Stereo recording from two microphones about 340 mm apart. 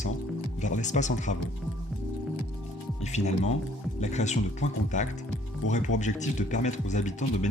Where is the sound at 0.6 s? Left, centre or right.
Left.